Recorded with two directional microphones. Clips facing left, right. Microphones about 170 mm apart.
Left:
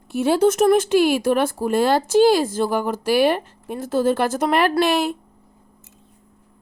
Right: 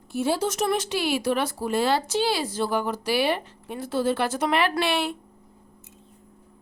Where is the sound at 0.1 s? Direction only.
65° left (ahead or behind); by 5.1 s 40° left (ahead or behind).